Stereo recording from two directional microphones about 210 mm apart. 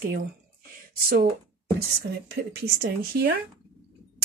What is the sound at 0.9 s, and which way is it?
A woman's voice, 45° right (ahead or behind).